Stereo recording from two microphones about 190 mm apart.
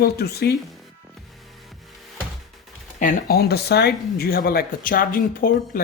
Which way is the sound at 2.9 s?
50° left (ahead or behind).